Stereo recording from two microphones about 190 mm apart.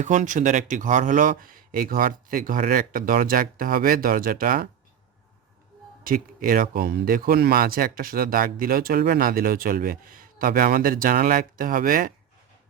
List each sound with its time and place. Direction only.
0.0 s speech: 40° right (ahead or behind)
6.0 s speech: 50° right (ahead or behind)